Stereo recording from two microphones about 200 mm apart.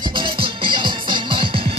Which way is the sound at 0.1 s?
25° right (ahead or behind).